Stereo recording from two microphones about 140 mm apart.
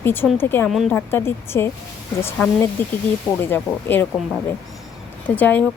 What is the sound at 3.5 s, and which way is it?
Speech, 15° left (ahead or behind).